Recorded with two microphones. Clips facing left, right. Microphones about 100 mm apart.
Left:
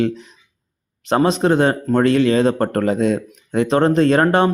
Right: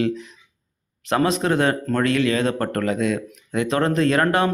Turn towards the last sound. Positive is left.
turn(degrees=30)  # may be behind; listen again after turning